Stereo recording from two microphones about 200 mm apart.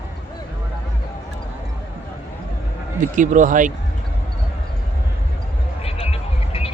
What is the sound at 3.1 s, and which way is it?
Speech, 40° right (ahead or behind).